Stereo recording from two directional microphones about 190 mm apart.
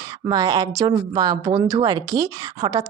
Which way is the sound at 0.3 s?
20° right (ahead or behind).